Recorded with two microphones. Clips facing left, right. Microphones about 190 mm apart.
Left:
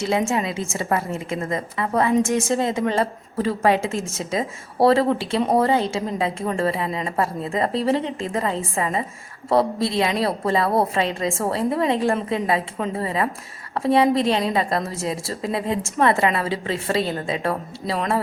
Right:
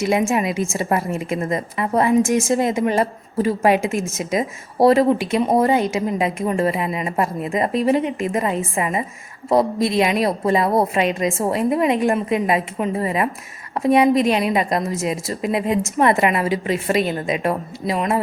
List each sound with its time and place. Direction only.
0.3 s speech: 15° right (ahead or behind)